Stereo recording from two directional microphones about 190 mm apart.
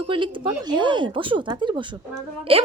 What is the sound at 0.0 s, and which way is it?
A woman's voice, 25° right (ahead or behind).